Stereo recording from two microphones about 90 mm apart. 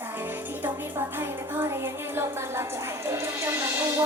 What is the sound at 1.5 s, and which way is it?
Music, 25° right (ahead or behind).